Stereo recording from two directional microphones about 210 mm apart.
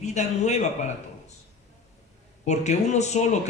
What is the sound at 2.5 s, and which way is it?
Speech, 35° left (ahead or behind).